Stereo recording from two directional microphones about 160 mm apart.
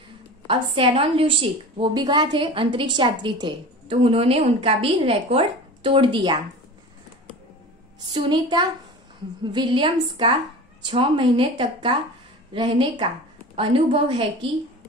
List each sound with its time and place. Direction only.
0.5 s a woman's voice: 35° right (ahead or behind)
8.1 s a woman's voice: 30° right (ahead or behind)